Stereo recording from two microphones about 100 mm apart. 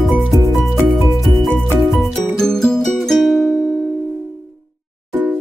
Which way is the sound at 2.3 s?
5° left (ahead or behind).